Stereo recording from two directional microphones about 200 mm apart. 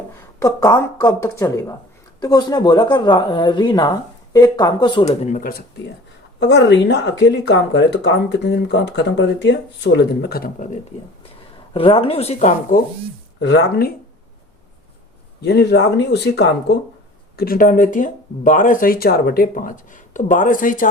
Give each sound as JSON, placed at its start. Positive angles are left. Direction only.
{"t": 0.3, "sound": "a woman's voice", "side_deg": 15}
{"t": 6.4, "sound": "speech", "side_deg": 60}
{"t": 11.7, "sound": "speech", "side_deg": 25}
{"t": 13.4, "sound": "speech", "side_deg": 55}
{"t": 15.4, "sound": "speech", "side_deg": 60}